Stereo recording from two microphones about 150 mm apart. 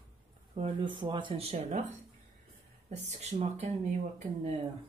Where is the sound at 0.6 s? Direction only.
35° right (ahead or behind).